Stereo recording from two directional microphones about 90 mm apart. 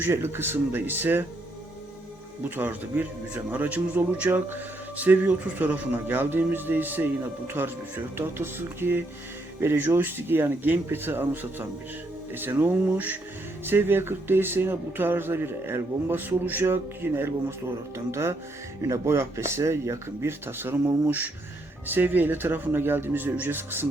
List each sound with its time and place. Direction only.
0.0 s a man's voice: 25° right (ahead or behind)
2.4 s a man's voice: 20° right (ahead or behind)